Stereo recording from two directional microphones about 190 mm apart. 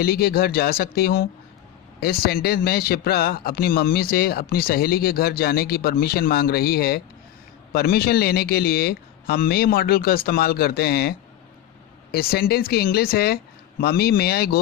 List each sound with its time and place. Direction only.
0.0 s a man's voice: 55° left (ahead or behind)
12.1 s a man's voice: 55° left (ahead or behind)